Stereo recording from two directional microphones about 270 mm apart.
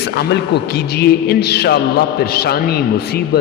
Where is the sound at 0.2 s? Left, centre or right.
Left.